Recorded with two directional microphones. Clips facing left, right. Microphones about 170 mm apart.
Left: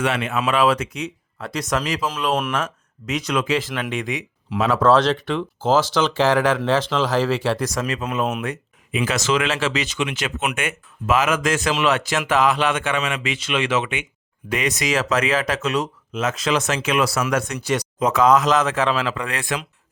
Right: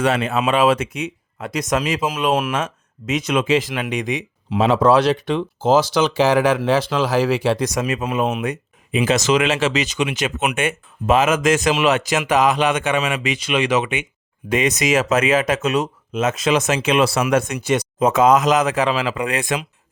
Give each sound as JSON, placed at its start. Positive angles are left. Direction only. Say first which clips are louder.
{"t": 0.0, "sound": "speech", "louder": "right 4 dB", "side_deg": -35}
{"t": 0.4, "sound": "speech", "louder": "right 2 dB", "side_deg": -20}
{"t": 2.6, "sound": "speech", "louder": "right 2 dB", "side_deg": -20}
{"t": 4.8, "sound": "speech", "louder": "left 1 dB", "side_deg": -10}
{"t": 8.4, "sound": "a sound", "louder": "right 3 dB", "side_deg": -20}
{"t": 9.0, "sound": "speech", "louder": "right 4 dB", "side_deg": -25}